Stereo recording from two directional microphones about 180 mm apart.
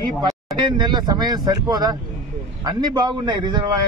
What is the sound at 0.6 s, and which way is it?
A man's voice, 25° right (ahead or behind).